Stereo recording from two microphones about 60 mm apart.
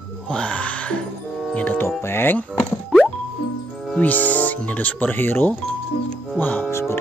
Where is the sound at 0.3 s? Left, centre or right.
Centre.